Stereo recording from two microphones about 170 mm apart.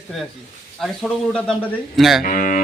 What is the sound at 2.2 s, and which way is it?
Speech, 50° left (ahead or behind).